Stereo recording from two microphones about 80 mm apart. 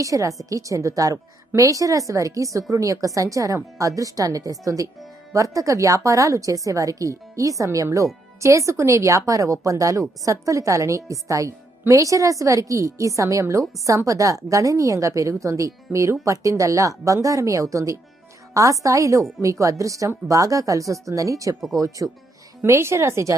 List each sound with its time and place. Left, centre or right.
0.0 s a woman's voice: right
22.6 s a woman's voice: right